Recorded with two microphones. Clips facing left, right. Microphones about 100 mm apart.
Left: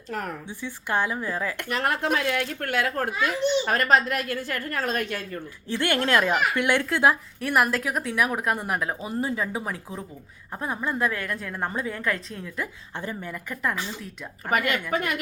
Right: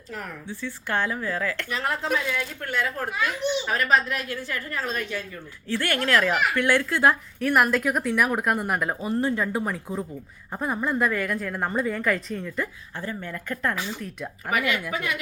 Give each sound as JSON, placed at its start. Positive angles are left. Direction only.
{"t": 0.1, "sound": "speech", "side_deg": 50}
{"t": 0.4, "sound": "speech", "side_deg": 15}
{"t": 1.7, "sound": "a woman's voice", "side_deg": 60}
{"t": 5.6, "sound": "a woman's voice", "side_deg": 20}
{"t": 7.1, "sound": "a woman's voice", "side_deg": 5}
{"t": 13.0, "sound": "speech", "side_deg": 15}
{"t": 14.0, "sound": "a woman's voice", "side_deg": 0}
{"t": 14.9, "sound": "speech", "side_deg": 50}